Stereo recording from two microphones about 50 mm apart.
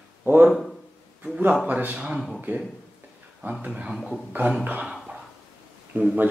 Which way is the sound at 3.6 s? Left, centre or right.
Right.